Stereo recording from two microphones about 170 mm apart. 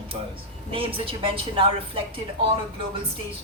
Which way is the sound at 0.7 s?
30° right (ahead or behind).